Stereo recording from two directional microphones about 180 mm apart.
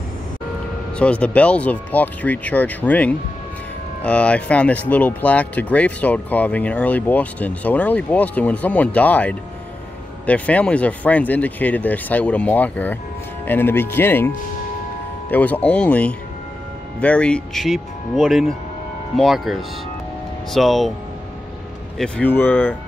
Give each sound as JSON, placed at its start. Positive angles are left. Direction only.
{"t": 0.9, "sound": "speech", "side_deg": 5}
{"t": 21.9, "sound": "speech", "side_deg": 5}